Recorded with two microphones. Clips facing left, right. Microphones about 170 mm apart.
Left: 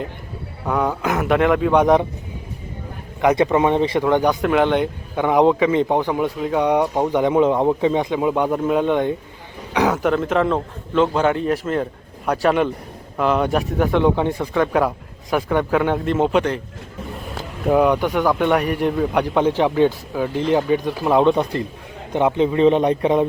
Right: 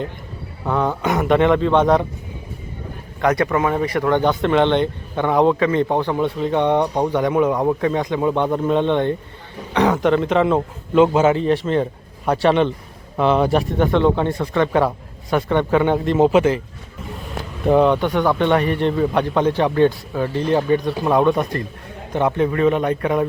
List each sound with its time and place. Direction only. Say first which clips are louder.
0.6 s speech: right 1 dB; 5° left (ahead or behind)
3.2 s speech: left 2 dB; 20° left (ahead or behind)
4.3 s speech: right 1 dB; 5° left (ahead or behind)
7.1 s speech: left 1 dB; 20° left (ahead or behind); by 16.6 s 5° right (ahead or behind)
17.7 s speech: right 1 dB; 10° left (ahead or behind); by 23.2 s 25° left (ahead or behind)